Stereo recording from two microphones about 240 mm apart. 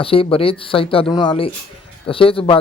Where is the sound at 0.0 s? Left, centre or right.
Left.